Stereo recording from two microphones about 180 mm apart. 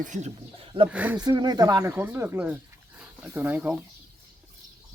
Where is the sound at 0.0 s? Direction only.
40° right (ahead or behind).